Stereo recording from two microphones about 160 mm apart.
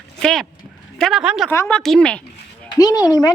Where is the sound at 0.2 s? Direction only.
5° left (ahead or behind).